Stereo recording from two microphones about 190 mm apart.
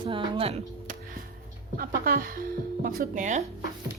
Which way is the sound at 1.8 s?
50° right (ahead or behind).